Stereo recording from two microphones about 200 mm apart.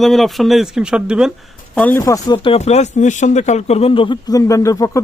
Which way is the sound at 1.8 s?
10° left (ahead or behind).